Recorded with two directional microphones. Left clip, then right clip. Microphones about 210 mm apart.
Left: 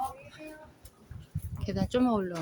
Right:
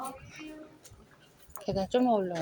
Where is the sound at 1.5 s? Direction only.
10° left (ahead or behind).